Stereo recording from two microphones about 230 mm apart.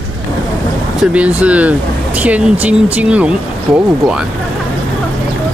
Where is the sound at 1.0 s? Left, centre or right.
Centre.